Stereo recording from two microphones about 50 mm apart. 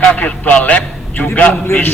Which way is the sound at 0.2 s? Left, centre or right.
Left.